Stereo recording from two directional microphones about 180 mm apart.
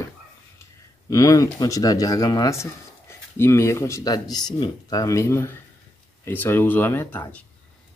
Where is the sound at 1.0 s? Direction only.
20° left (ahead or behind).